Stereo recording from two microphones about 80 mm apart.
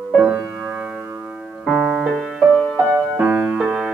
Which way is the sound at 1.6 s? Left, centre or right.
Centre.